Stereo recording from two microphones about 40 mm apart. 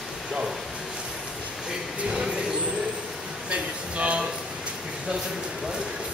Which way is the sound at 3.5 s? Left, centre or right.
Right.